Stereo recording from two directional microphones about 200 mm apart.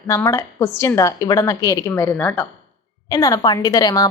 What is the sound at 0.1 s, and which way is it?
A woman's voice, 15° left (ahead or behind).